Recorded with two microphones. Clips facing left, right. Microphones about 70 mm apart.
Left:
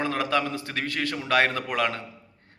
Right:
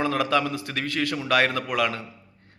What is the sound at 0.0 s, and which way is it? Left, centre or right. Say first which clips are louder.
A man's voice: right 2 dB; left.